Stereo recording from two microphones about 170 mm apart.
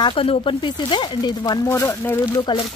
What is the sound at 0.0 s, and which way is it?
Speech, 35° left (ahead or behind).